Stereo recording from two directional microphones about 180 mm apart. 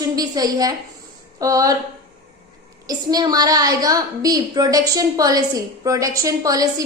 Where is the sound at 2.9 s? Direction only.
20° right (ahead or behind).